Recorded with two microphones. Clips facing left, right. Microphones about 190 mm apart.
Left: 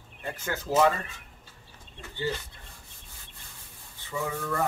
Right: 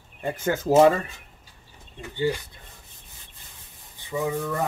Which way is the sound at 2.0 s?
15° right (ahead or behind).